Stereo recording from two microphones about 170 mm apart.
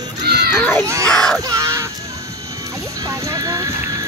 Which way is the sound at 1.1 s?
5° left (ahead or behind).